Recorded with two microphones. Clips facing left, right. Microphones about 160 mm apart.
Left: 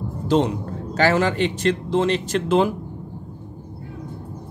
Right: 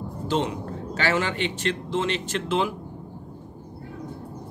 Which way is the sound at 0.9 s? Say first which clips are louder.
Left 6 dB; 40° left (ahead or behind).